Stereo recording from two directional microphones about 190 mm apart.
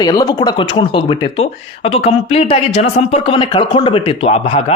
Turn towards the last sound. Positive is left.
turn(degrees=35)  # may be behind; listen again after turning